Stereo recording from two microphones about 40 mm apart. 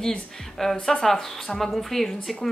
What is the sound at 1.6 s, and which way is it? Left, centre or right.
Speech, centre.